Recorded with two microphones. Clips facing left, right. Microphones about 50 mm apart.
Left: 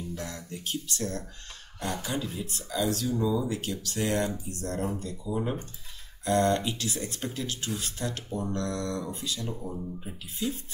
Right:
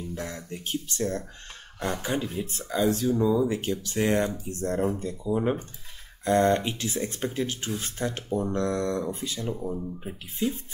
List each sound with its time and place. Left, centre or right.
0.1 s speech: right
9.5 s speech: centre
10.0 s speech: right